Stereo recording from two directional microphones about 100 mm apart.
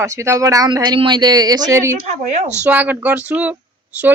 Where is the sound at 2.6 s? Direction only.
15° right (ahead or behind).